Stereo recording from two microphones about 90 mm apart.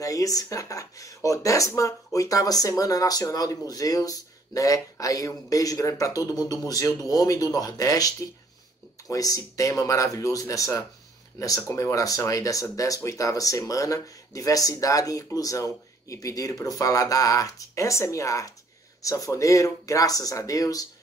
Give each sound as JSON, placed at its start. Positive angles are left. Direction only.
{"t": 0.0, "sound": "speech", "side_deg": 40}